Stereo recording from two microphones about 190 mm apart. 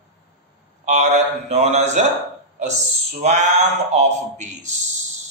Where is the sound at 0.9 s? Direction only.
35° right (ahead or behind).